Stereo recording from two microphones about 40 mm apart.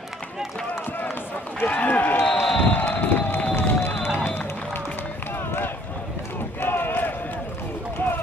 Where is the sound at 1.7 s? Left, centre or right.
Left.